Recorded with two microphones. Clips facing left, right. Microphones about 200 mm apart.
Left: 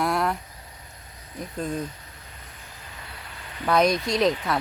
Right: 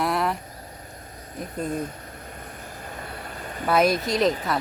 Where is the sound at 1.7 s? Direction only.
50° right (ahead or behind).